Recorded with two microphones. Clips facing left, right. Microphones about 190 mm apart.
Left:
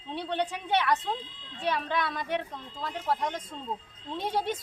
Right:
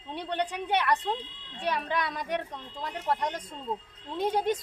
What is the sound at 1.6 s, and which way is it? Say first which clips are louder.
Speech: even; 15° right (ahead or behind).